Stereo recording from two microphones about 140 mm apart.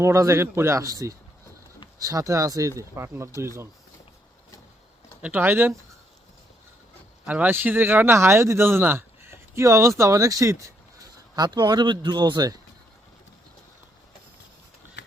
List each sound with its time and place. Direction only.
0.0 s speech: 20° right (ahead or behind)
5.2 s speech: 15° right (ahead or behind)
7.3 s speech: 10° right (ahead or behind); by 12.5 s 30° right (ahead or behind)